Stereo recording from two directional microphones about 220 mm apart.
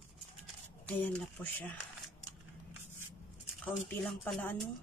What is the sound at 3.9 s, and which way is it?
Speech, 5° left (ahead or behind).